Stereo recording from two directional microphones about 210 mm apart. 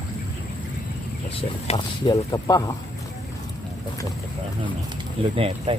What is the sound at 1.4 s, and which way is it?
Speech, 25° left (ahead or behind).